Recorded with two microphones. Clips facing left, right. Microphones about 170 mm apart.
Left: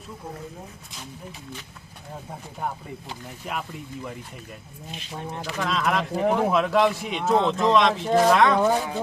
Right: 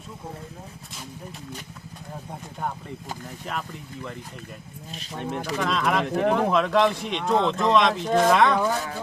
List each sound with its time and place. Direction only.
3.5 s speech: 5° left (ahead or behind)
5.5 s speech: centre (ahead or behind)
8.5 s speech: 15° left (ahead or behind)